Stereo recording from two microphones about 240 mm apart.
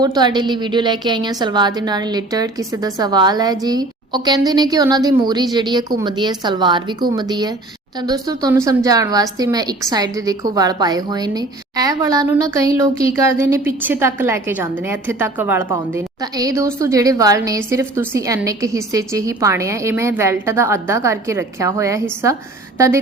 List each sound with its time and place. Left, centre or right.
0.0 s a woman's voice: centre